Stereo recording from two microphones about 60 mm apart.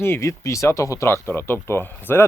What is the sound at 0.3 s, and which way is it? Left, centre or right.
Speech, left.